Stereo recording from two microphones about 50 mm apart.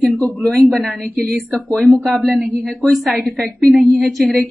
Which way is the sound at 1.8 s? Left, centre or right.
Centre.